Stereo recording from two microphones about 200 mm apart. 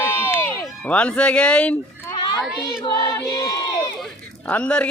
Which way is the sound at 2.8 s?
15° left (ahead or behind).